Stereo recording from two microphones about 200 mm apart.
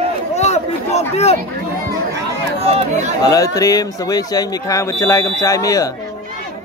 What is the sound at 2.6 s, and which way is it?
Speech, 35° right (ahead or behind).